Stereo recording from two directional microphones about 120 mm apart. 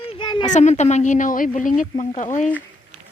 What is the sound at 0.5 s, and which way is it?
Speech, 75° left (ahead or behind).